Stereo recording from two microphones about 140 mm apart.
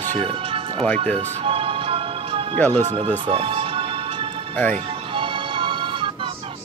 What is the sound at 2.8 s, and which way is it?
Speech, 50° right (ahead or behind).